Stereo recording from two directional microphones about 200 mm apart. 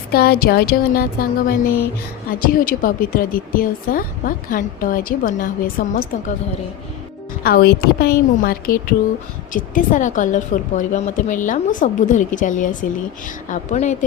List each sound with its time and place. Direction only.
0.1 s a woman's voice: 50° left (ahead or behind)
7.4 s a woman's voice: 50° left (ahead or behind)